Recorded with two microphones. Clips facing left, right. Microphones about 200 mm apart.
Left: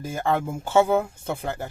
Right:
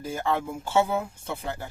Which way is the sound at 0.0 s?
50° left (ahead or behind).